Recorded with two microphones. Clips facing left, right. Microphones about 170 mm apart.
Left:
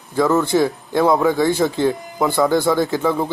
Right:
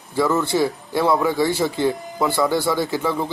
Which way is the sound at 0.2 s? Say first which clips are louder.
Left 3 dB; 20° left (ahead or behind).